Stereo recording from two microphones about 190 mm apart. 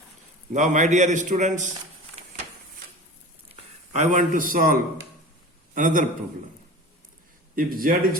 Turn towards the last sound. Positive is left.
turn(degrees=-50)  # may be behind; listen again after turning